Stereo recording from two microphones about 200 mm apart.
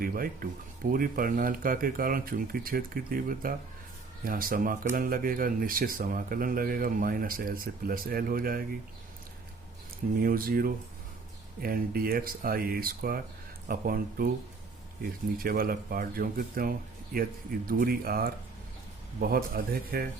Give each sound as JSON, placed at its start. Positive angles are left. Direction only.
{"t": 0.0, "sound": "speech", "side_deg": -45}
{"t": 10.2, "sound": "speech", "side_deg": -45}
{"t": 15.4, "sound": "speech", "side_deg": -45}